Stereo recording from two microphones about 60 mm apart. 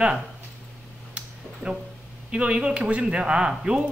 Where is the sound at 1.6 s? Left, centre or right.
Centre.